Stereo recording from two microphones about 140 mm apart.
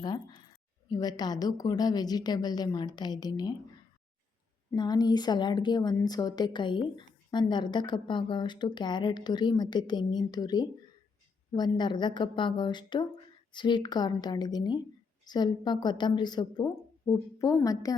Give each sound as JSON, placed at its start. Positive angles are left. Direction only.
{"t": 0.0, "sound": "a sound", "side_deg": 30}
{"t": 0.9, "sound": "a woman's voice", "side_deg": 30}
{"t": 4.7, "sound": "a woman's voice", "side_deg": 30}